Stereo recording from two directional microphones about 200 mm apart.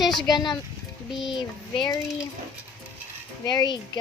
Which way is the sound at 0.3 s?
20° left (ahead or behind).